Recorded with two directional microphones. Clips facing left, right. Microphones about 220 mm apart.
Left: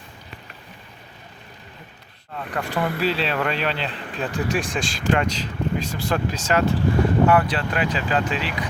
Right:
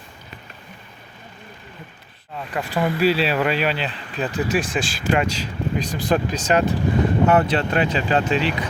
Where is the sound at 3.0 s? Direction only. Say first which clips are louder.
Right 6 dB; 10° right (ahead or behind); by 8.5 s 25° right (ahead or behind).